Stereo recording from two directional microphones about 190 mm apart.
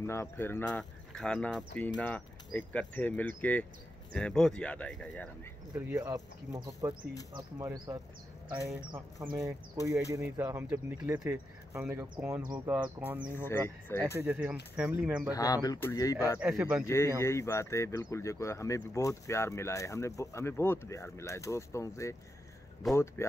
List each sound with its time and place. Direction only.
0.0 s speech: 15° left (ahead or behind)
5.8 s speech: 15° right (ahead or behind)
13.3 s speech: 10° left (ahead or behind)
14.2 s speech: 5° right (ahead or behind)
15.3 s speech: 20° left (ahead or behind)
16.3 s speech: 5° right (ahead or behind)
16.8 s speech: 15° left (ahead or behind)
22.8 s speech: centre (ahead or behind)